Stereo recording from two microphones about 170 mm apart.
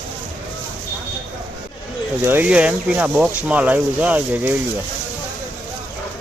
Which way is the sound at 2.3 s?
10° right (ahead or behind).